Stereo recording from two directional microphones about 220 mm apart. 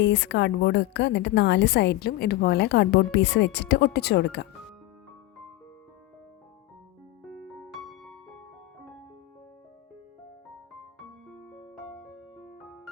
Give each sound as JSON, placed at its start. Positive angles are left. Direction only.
{"t": 0.0, "sound": "a woman's voice", "side_deg": 50}
{"t": 7.3, "sound": "music", "side_deg": 0}
{"t": 11.3, "sound": "music", "side_deg": 0}